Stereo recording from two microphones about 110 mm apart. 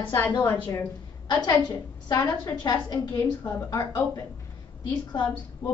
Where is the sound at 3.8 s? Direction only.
35° left (ahead or behind).